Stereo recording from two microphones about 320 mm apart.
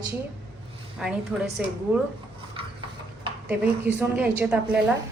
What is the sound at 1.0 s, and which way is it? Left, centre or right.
A woman's voice, centre.